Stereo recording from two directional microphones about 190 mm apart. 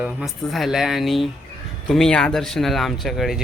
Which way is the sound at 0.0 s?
5° right (ahead or behind).